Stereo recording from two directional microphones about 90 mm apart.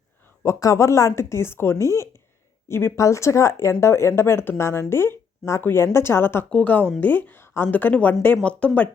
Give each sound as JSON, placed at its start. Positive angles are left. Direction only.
{"t": 0.4, "sound": "speech", "side_deg": 35}